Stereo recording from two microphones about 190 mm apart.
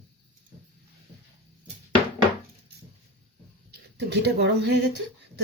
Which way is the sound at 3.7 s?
60° right (ahead or behind).